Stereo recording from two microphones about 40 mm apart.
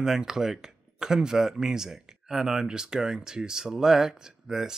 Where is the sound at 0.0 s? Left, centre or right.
Centre.